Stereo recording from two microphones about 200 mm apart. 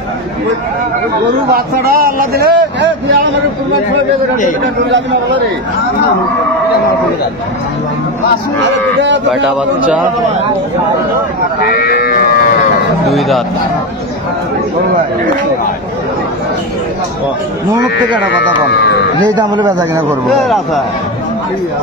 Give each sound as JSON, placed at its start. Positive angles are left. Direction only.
{"t": 1.5, "sound": "speech", "side_deg": -50}
{"t": 11.7, "sound": "livestock", "side_deg": 50}
{"t": 18.4, "sound": "speech", "side_deg": 60}
{"t": 19.2, "sound": "speech", "side_deg": -20}
{"t": 20.2, "sound": "speech", "side_deg": 0}